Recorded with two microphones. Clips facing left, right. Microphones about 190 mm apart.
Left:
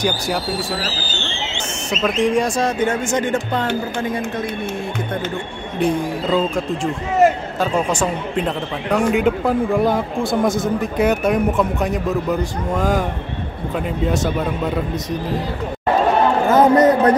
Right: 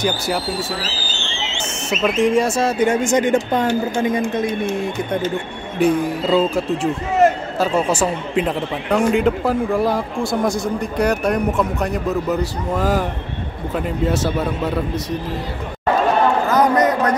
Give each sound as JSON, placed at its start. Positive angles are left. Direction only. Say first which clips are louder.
{"t": 0.0, "sound": "a man's voice", "louder": "even", "side_deg": 0}
{"t": 1.9, "sound": "speech", "louder": "right 1 dB", "side_deg": -5}
{"t": 5.8, "sound": "a man's voice", "louder": "right 2 dB", "side_deg": -5}
{"t": 16.4, "sound": "a sound", "louder": "left 3 dB", "side_deg": 25}